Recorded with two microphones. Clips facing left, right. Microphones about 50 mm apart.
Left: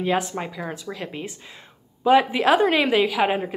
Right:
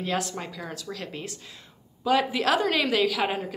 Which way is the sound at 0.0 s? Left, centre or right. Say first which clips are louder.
Left 6 dB; left.